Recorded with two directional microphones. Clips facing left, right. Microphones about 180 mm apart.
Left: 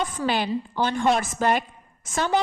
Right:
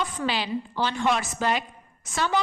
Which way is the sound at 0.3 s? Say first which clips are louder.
Left 3 dB; 50° left (ahead or behind).